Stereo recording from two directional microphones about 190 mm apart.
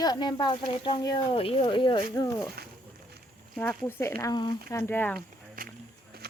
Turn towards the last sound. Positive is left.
turn(degrees=-45)  # may be behind; listen again after turning